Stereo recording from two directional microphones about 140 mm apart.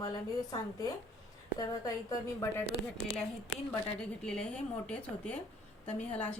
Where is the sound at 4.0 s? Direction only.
5° left (ahead or behind).